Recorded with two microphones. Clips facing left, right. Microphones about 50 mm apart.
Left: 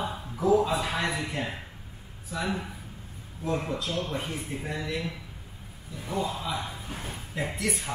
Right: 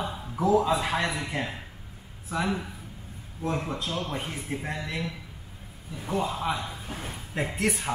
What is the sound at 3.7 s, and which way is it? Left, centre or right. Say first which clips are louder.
Speech: left 1 dB; right.